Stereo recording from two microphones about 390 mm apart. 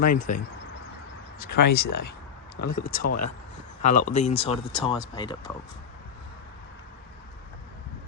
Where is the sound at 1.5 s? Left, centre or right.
Left.